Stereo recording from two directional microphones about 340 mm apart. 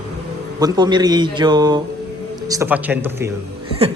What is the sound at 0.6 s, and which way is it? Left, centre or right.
Speech, centre.